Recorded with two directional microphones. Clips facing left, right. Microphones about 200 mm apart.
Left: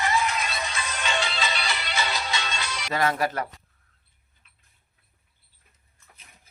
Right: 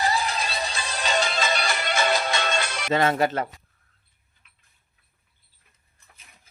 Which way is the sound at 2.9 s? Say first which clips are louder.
Right 4 dB; 25° right (ahead or behind).